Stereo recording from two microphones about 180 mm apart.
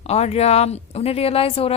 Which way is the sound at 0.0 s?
35° left (ahead or behind).